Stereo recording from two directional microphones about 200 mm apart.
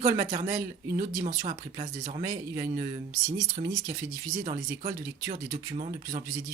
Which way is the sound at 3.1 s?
15° right (ahead or behind).